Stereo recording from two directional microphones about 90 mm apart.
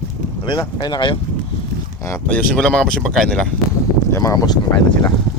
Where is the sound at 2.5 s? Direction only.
10° left (ahead or behind).